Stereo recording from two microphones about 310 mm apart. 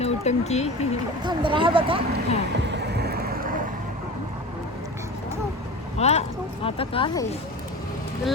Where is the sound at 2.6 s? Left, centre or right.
Right.